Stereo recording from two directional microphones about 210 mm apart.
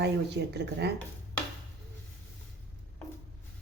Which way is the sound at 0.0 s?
55° right (ahead or behind).